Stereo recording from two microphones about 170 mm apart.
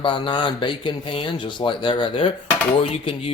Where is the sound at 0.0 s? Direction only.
30° left (ahead or behind).